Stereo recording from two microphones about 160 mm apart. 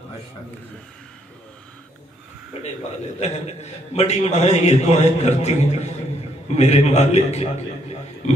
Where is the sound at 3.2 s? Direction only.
40° left (ahead or behind).